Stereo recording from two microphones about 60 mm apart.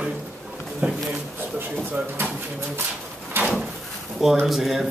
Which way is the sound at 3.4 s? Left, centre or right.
Right.